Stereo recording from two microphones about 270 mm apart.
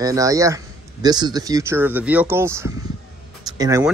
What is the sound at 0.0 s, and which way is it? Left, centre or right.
Speech, centre.